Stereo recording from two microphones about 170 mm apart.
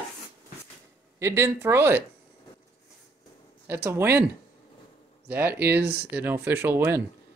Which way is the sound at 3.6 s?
15° right (ahead or behind).